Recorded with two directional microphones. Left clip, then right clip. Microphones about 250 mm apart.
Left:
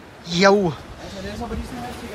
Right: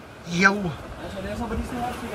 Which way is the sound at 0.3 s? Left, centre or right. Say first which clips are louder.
Left 4 dB; centre.